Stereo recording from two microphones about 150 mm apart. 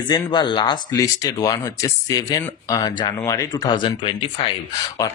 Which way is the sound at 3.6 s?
35° left (ahead or behind).